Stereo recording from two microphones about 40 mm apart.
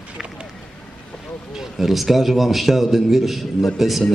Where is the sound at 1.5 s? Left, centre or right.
Centre.